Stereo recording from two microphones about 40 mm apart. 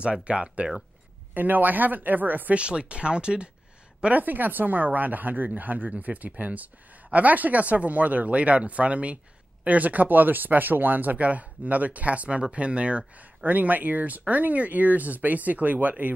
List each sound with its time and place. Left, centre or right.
0.0 s speech: right
1.3 s speech: right
2.5 s speech: right
4.1 s speech: right
13.5 s speech: right